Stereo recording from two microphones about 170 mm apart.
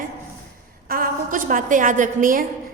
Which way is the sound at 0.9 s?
55° right (ahead or behind).